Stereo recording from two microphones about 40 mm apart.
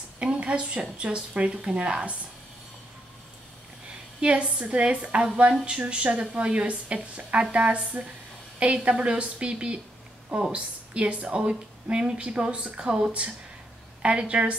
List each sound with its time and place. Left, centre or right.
0.2 s speech: right
4.2 s a woman's voice: right